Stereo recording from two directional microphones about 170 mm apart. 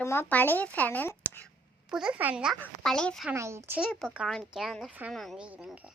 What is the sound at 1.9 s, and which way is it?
A woman's voice, 5° right (ahead or behind).